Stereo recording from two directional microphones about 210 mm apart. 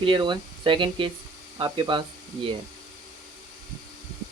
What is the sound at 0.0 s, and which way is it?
Speech, 25° right (ahead or behind).